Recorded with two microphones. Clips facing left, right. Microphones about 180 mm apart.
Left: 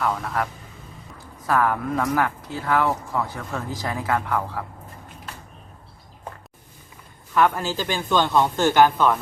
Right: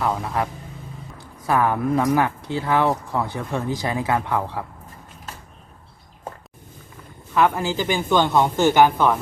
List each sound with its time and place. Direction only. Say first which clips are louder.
0.0 s speech: right 1 dB; 20° right (ahead or behind)
1.5 s speech: right 2 dB; 20° right (ahead or behind)
7.3 s speech: right 1 dB; 15° right (ahead or behind)